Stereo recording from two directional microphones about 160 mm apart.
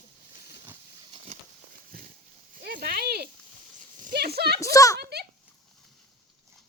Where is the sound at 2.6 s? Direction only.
70° right (ahead or behind).